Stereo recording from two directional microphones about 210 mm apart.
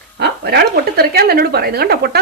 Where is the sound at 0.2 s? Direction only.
50° right (ahead or behind).